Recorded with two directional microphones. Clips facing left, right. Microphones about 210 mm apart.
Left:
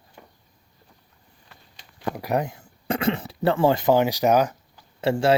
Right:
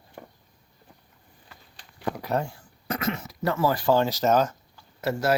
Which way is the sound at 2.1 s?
15° left (ahead or behind).